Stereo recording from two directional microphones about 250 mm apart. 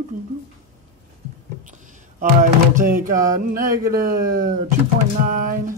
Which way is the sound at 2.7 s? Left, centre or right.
Right.